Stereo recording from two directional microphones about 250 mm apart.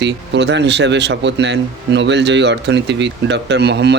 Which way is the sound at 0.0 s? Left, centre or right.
Right.